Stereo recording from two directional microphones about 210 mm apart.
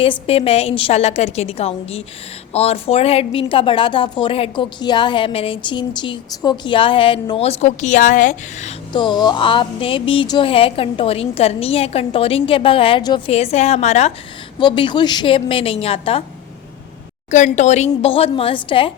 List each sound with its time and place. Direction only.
0.0 s a woman's voice: 25° left (ahead or behind)
8.9 s a woman's voice: 20° left (ahead or behind)
17.3 s a woman's voice: 35° left (ahead or behind)